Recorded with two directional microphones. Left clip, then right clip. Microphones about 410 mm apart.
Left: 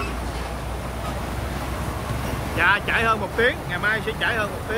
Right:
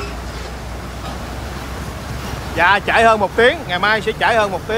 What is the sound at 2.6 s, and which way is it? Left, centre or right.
Speech, centre.